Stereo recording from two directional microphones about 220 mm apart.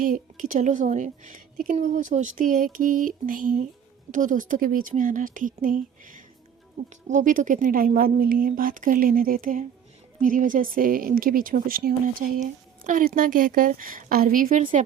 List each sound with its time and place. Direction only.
0.0 s a woman's voice: 40° right (ahead or behind)